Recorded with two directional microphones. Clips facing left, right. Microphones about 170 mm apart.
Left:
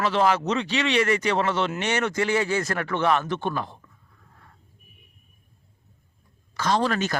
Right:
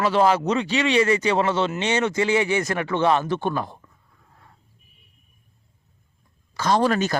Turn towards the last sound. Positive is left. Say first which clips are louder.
# right 3 dB
turn(degrees=-40)  # may be behind; listen again after turning